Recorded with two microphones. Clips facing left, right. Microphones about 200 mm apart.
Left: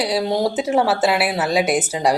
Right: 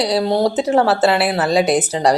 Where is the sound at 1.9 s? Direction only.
10° left (ahead or behind).